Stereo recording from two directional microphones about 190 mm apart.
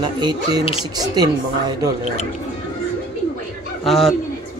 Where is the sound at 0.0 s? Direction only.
20° right (ahead or behind).